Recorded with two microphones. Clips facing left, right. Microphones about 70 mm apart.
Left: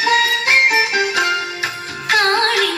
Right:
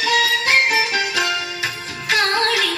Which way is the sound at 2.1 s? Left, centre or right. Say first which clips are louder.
Left 3 dB; left.